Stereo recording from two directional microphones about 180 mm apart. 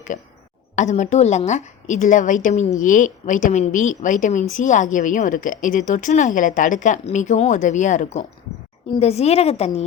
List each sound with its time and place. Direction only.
0.1 s a woman's voice: 45° left (ahead or behind)